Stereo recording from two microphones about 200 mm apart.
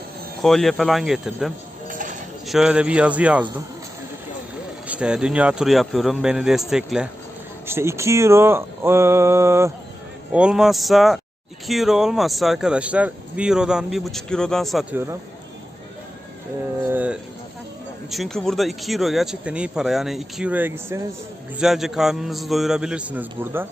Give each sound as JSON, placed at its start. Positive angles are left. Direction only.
{"t": 0.4, "sound": "speech", "side_deg": 0}
{"t": 1.9, "sound": "a sound", "side_deg": -40}
{"t": 2.5, "sound": "speech", "side_deg": -5}
{"t": 4.9, "sound": "speech", "side_deg": -5}
{"t": 7.7, "sound": "speech", "side_deg": -15}
{"t": 16.8, "sound": "speech", "side_deg": -10}